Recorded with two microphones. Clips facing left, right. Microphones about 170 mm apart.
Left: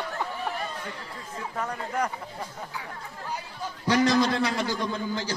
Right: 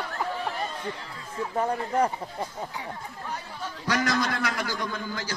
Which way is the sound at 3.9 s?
25° left (ahead or behind).